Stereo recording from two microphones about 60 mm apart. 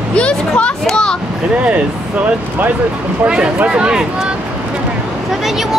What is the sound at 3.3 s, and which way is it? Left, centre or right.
Speech, centre.